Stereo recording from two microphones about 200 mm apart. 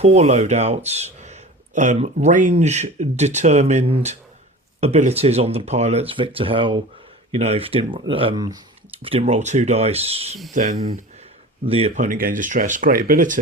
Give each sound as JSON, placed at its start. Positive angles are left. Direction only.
{"t": 0.0, "sound": "speech", "side_deg": -35}